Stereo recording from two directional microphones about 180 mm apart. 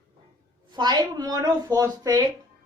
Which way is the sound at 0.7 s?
25° right (ahead or behind).